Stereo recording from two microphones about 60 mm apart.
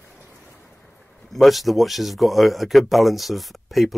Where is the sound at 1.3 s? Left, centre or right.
Centre.